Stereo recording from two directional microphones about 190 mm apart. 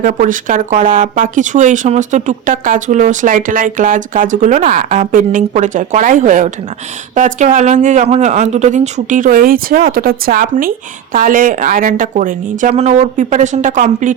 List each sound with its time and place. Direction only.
0.0 s speech: 45° right (ahead or behind)